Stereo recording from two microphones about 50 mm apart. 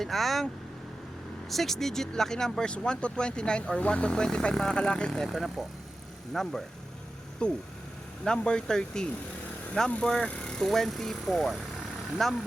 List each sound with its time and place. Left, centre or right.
0.0 s speech: centre
1.5 s speech: centre
5.2 s speech: centre
7.4 s speech: left
10.6 s speech: centre